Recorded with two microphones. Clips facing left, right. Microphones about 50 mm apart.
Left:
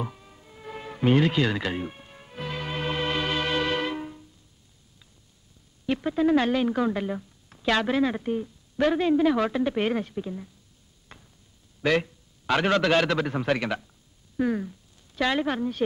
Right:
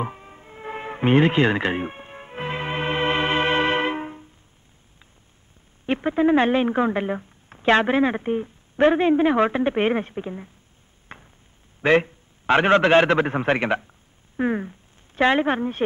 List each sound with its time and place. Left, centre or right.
0.0 s music: right
5.9 s a woman's voice: right
11.1 s a sound: right
11.8 s a man's voice: right